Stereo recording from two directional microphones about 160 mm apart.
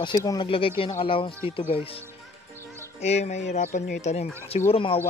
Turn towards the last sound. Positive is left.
turn(degrees=35)  # may be behind; listen again after turning